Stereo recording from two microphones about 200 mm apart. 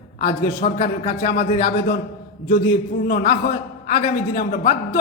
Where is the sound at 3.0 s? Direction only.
40° left (ahead or behind).